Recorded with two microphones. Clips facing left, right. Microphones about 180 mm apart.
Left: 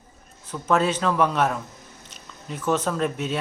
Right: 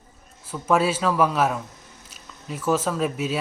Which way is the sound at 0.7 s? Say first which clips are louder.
Right 1 dB; 5° right (ahead or behind).